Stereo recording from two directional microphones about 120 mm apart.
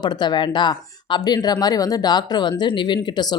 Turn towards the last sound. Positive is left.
turn(degrees=35)  # may be behind; listen again after turning